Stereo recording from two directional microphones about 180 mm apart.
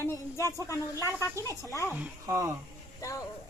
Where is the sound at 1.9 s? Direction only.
15° right (ahead or behind).